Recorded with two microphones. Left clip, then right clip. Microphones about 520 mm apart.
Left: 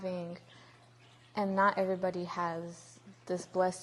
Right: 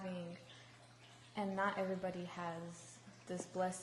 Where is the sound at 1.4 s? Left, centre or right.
Left.